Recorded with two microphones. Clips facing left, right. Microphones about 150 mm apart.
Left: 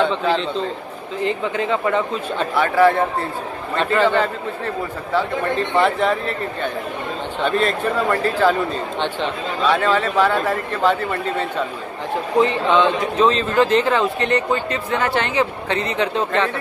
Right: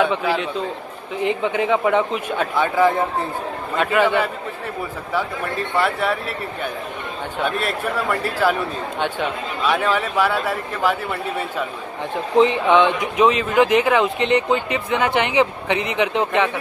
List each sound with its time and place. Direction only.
0.0 s speech: 10° right (ahead or behind)
5.8 s speech: 5° right (ahead or behind)